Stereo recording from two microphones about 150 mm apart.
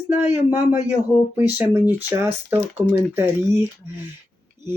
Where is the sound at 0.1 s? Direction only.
15° right (ahead or behind).